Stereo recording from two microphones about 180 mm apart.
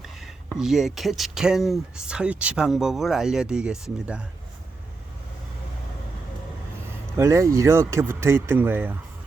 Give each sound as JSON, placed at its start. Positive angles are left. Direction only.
{"t": 0.2, "sound": "speech", "side_deg": 0}
{"t": 7.2, "sound": "speech", "side_deg": -15}